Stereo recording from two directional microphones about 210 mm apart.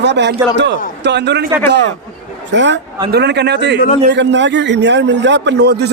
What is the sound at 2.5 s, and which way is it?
Speech, 60° right (ahead or behind).